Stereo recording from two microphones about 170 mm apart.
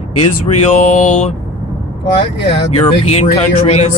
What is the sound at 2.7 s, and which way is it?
Speech, 35° left (ahead or behind).